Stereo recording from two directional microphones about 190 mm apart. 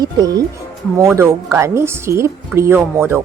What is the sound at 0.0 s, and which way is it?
A woman's voice, 20° right (ahead or behind).